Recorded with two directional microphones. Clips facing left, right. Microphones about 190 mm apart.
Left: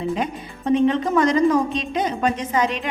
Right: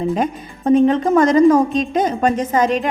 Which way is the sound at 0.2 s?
45° right (ahead or behind).